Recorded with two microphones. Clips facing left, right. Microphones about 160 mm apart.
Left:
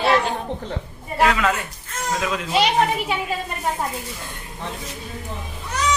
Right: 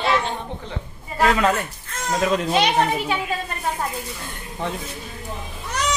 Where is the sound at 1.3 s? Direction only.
40° right (ahead or behind).